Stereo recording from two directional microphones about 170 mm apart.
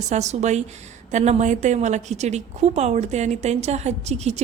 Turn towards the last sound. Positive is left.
turn(degrees=-40)  # may be behind; listen again after turning